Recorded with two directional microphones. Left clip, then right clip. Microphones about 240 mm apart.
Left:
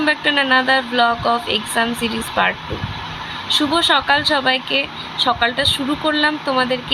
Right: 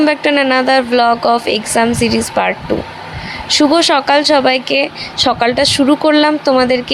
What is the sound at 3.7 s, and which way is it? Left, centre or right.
Speech, right.